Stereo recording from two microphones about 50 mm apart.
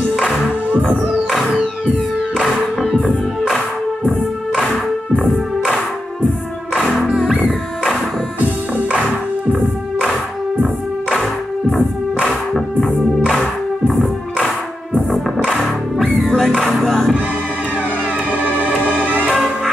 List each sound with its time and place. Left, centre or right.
5.2 s music: centre
7.4 s music: centre
11.7 s music: centre
13.8 s music: centre
15.5 s music: centre
18.9 s music: right
19.3 s music: centre